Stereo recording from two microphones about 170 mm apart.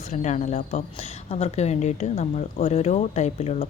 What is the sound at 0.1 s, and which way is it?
A woman's voice, 45° left (ahead or behind).